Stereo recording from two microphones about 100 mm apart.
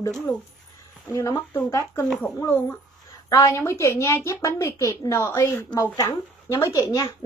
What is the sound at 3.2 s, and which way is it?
A woman's voice, 30° left (ahead or behind).